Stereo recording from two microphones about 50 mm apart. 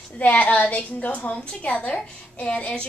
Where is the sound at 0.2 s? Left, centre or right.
Left.